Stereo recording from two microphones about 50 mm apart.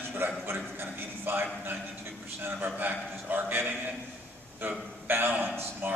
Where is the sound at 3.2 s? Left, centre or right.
Right.